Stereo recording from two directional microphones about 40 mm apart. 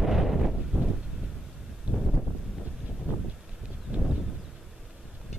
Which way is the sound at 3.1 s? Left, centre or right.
Right.